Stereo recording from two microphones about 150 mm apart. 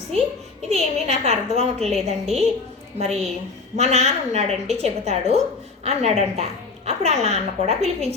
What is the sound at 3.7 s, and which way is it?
A woman's voice, 45° right (ahead or behind).